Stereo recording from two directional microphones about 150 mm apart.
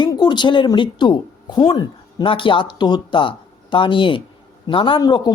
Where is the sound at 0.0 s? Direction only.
30° left (ahead or behind).